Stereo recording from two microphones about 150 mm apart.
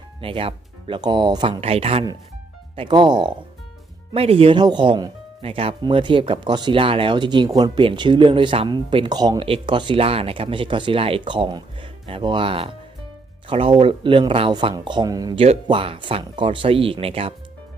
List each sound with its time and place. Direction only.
0.2 s speech: 35° right (ahead or behind)
1.6 s speech: 40° right (ahead or behind)
2.7 s speech: 30° right (ahead or behind)